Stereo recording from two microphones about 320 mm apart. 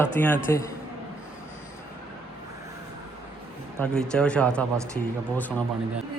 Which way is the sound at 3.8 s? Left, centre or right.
Centre.